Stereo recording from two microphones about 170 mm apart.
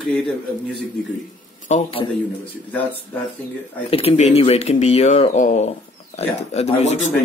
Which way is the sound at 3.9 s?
35° left (ahead or behind).